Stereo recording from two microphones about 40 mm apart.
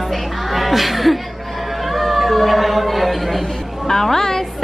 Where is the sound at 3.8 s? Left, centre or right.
Centre.